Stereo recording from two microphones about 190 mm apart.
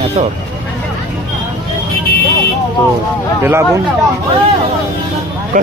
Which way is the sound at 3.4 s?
15° right (ahead or behind).